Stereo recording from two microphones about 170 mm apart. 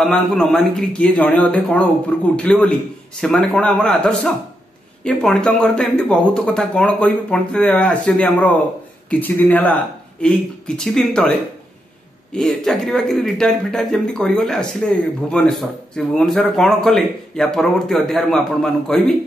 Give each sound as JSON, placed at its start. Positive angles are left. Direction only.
{"t": 0.0, "sound": "a man's voice", "side_deg": 5}
{"t": 10.8, "sound": "a man's voice", "side_deg": 5}